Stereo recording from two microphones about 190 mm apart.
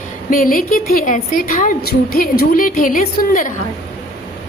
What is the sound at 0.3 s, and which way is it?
A woman's voice, 45° left (ahead or behind).